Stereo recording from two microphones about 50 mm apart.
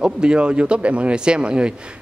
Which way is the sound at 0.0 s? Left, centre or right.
Centre.